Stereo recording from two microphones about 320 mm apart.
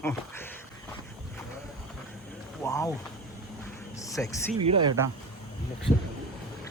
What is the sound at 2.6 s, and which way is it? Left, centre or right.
Speech, centre.